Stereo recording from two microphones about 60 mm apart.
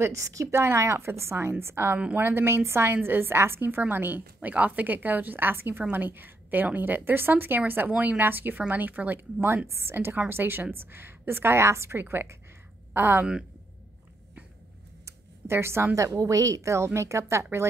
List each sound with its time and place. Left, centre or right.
0.0 s speech: right
0.6 s a woman's voice: right
9.7 s a woman's voice: right
12.0 s a woman's voice: right
13.2 s speech: centre
15.0 s a sound: right
15.9 s speech: right